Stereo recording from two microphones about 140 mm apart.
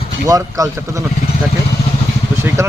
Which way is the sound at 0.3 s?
25° right (ahead or behind).